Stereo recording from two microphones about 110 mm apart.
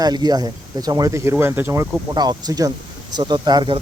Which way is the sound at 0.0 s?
40° right (ahead or behind).